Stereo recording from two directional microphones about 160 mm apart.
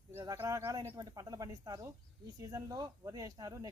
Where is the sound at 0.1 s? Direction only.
15° right (ahead or behind).